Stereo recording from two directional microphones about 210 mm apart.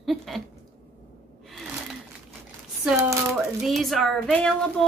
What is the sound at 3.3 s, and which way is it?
A woman's voice, centre (ahead or behind).